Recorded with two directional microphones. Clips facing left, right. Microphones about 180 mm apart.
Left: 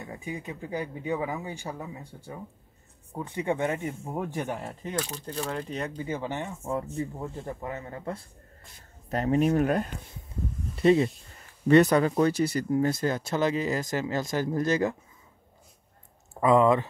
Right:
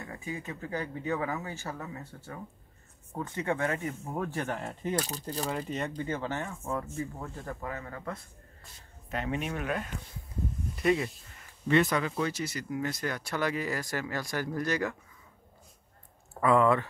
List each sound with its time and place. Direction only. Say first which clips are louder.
0.0 s speech: left 2 dB; 15° left (ahead or behind)
4.9 s speech: left 1 dB; 40° right (ahead or behind)
5.5 s speech: even; centre (ahead or behind); by 8.3 s 30° left (ahead or behind)
9.1 s speech: left 10 dB; 40° left (ahead or behind)
10.8 s speech: left 6 dB; 30° left (ahead or behind)
11.6 s speech: left 7 dB; 40° left (ahead or behind); by 15.0 s 25° left (ahead or behind)
16.3 s speech: left 3 dB; 20° left (ahead or behind)